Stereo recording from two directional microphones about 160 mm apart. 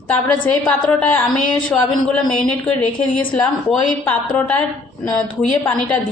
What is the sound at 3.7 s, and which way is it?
Speech, 10° left (ahead or behind).